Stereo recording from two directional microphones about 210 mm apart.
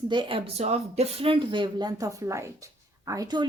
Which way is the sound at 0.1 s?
25° right (ahead or behind).